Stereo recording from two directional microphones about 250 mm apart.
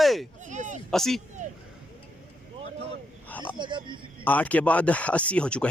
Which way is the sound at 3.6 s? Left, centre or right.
Centre.